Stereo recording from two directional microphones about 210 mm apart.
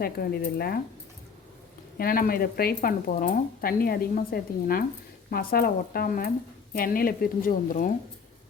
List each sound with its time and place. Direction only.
0.0 s speech: 45° left (ahead or behind)
2.0 s speech: 45° left (ahead or behind)